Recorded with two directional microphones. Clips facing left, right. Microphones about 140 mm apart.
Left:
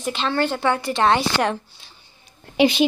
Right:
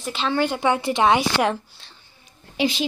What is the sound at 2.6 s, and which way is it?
Speech, 65° left (ahead or behind).